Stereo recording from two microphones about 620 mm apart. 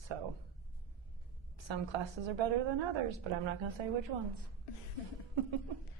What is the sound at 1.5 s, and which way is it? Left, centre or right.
A woman's voice, right.